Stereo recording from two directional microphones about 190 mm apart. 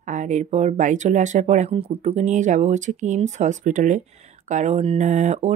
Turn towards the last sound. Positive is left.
turn(degrees=-35)  # may be behind; listen again after turning